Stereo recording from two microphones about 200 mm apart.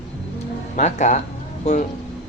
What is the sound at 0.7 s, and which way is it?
Speech, 35° left (ahead or behind).